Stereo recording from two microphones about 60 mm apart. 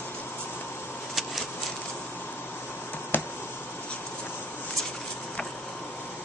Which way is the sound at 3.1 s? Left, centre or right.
Left.